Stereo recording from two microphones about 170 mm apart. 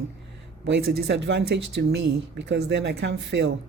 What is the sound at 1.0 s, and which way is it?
Speech, 85° right.